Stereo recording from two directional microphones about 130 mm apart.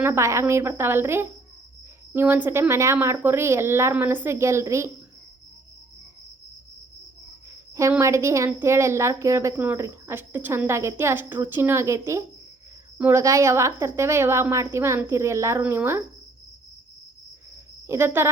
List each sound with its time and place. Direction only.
0.0 s speech: 20° right (ahead or behind)
7.7 s speech: 20° right (ahead or behind)
17.8 s speech: 20° right (ahead or behind)